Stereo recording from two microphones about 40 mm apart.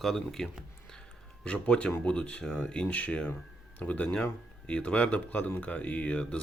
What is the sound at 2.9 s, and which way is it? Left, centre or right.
Speech, left.